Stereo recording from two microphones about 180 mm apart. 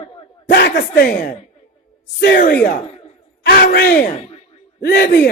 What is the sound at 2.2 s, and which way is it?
Speech, 60° left (ahead or behind).